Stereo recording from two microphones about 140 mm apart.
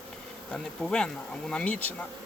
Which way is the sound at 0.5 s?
5° left (ahead or behind).